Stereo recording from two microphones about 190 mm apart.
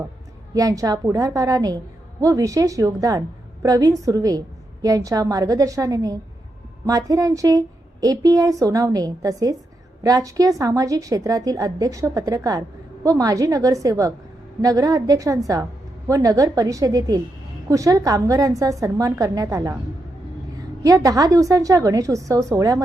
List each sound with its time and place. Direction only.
0.5 s a woman's voice: 20° right (ahead or behind)